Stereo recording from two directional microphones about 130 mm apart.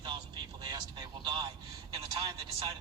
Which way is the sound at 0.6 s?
35° right (ahead or behind).